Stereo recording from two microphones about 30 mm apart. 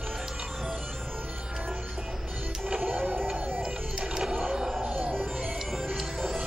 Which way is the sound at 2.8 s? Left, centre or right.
Right.